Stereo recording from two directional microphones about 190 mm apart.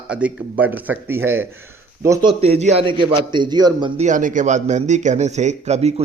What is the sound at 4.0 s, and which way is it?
Speech, 40° right (ahead or behind).